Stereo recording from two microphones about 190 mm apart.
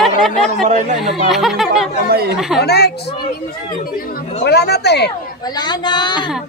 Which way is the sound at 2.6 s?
60° left (ahead or behind).